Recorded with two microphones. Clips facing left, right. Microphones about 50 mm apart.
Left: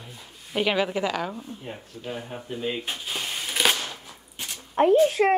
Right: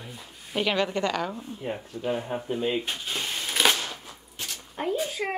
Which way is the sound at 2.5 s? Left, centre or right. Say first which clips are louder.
Right 2 dB; centre.